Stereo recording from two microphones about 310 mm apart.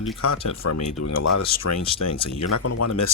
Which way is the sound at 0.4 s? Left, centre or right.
Left.